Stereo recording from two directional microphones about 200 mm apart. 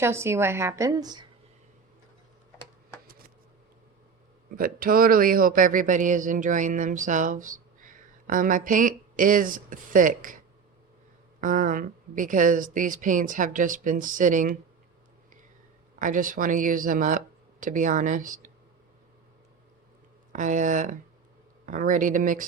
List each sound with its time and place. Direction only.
0.0 s a woman's voice: 15° right (ahead or behind)
3.1 s a sound: 50° right (ahead or behind)
4.5 s speech: 45° right (ahead or behind)
11.3 s speech: 40° right (ahead or behind)
16.0 s speech: 40° right (ahead or behind)
20.3 s speech: 40° right (ahead or behind)